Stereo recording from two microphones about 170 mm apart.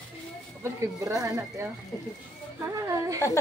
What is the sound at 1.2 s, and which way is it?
Speech, 20° right (ahead or behind).